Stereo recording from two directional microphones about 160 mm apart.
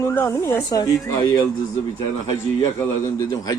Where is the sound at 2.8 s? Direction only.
20° left (ahead or behind).